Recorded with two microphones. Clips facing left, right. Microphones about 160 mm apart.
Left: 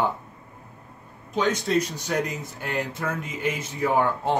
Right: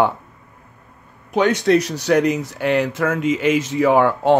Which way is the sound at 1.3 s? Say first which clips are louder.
Right 8 dB; 70° right (ahead or behind).